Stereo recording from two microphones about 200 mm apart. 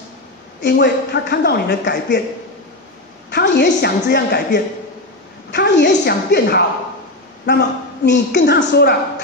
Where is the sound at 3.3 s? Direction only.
55° left (ahead or behind).